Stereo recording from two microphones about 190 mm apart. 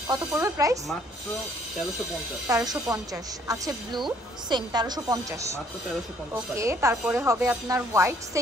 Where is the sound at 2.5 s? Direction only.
15° right (ahead or behind).